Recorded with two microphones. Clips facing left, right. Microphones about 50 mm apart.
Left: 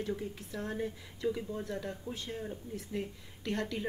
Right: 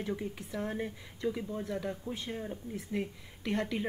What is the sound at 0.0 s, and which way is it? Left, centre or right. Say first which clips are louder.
A woman's voice: right 1 dB; right.